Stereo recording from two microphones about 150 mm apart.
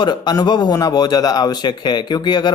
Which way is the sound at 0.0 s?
30° left (ahead or behind).